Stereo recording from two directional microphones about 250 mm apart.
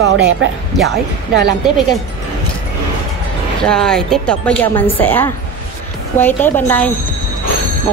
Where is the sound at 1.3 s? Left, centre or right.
Right.